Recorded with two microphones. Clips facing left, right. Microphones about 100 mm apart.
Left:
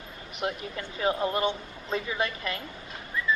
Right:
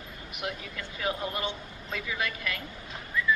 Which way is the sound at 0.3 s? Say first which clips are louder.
Left 5 dB; 30° left (ahead or behind).